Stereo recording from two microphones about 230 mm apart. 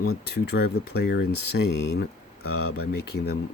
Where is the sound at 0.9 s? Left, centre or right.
Left.